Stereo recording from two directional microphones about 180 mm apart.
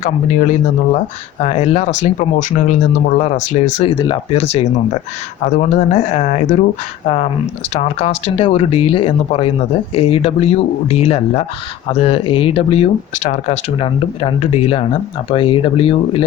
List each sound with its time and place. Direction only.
0.0 s speech: 45° left (ahead or behind)
5.5 s speech: 40° left (ahead or behind)
7.7 s speech: 35° left (ahead or behind)